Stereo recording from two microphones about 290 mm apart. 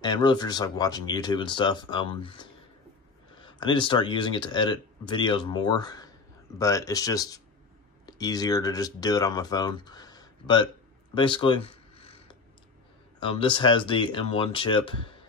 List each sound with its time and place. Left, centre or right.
0.0 s speech: centre
3.4 s speech: centre
11.1 s a sound: centre
13.2 s speech: centre